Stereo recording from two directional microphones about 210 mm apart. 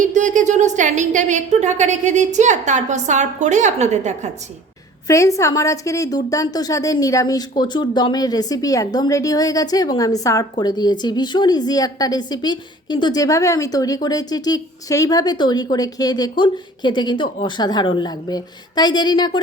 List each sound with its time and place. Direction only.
0.0 s a woman's voice: 35° right (ahead or behind)
5.0 s a woman's voice: 15° left (ahead or behind)